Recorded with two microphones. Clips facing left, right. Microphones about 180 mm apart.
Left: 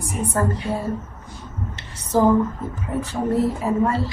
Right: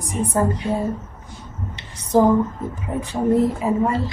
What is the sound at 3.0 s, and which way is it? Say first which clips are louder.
A woman's voice: right 3 dB; 15° right (ahead or behind).